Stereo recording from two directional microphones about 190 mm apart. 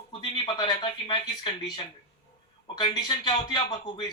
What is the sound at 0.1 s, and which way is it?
Speech, 20° left (ahead or behind).